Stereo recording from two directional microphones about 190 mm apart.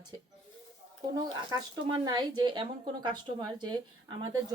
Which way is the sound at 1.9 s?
25° right (ahead or behind).